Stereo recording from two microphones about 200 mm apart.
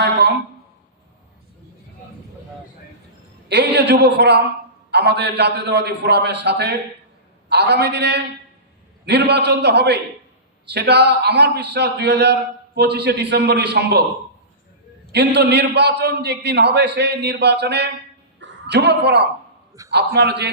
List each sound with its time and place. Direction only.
0.0 s a sound: 55° right (ahead or behind)
3.5 s a man's voice: 55° right (ahead or behind)
15.1 s a man's voice: 55° right (ahead or behind)